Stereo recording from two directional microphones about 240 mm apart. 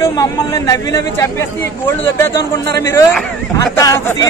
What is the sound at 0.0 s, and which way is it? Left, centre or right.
Speech, centre.